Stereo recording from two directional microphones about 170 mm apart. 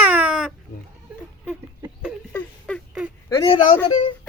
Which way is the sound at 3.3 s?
30° left (ahead or behind).